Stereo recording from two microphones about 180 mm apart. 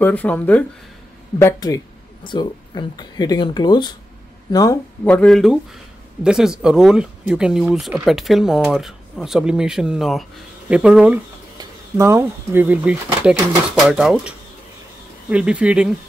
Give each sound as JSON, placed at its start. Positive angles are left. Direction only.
{"t": 0.0, "sound": "speech", "side_deg": 10}
{"t": 1.4, "sound": "speech", "side_deg": 20}
{"t": 5.0, "sound": "speech", "side_deg": 5}
{"t": 11.5, "sound": "speech", "side_deg": -15}